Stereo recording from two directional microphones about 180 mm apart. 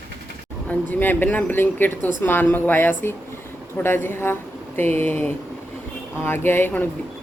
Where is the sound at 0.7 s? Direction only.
10° left (ahead or behind).